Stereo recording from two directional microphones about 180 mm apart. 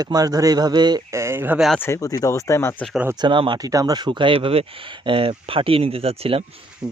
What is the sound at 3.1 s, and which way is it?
Speech, 25° right (ahead or behind).